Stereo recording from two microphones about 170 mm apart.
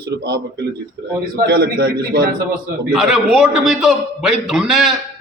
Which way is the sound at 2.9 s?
5° right (ahead or behind).